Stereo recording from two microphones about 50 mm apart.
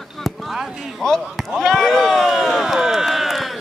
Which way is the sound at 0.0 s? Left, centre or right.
Centre.